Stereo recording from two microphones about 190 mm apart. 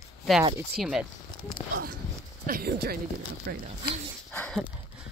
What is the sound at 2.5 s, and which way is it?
Speech, 55° right (ahead or behind).